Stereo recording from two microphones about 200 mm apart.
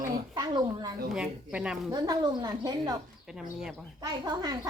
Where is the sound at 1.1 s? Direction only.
5° right (ahead or behind).